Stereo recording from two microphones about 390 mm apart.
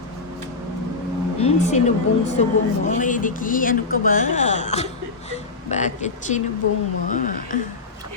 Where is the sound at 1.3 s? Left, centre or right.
Centre.